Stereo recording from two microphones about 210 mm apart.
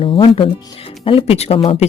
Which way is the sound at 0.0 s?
25° left (ahead or behind).